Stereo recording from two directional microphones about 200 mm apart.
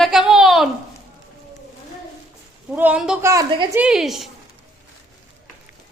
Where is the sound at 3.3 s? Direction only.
20° right (ahead or behind).